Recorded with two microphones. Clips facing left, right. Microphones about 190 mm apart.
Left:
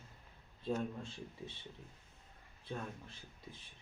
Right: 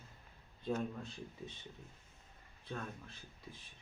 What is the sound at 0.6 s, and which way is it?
Speech, 30° left (ahead or behind).